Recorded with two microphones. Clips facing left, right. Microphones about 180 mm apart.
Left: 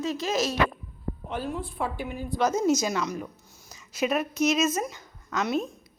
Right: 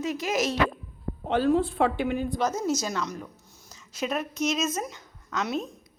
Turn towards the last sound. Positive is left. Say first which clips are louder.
# left 2 dB
turn(degrees=5)  # may be behind; listen again after turning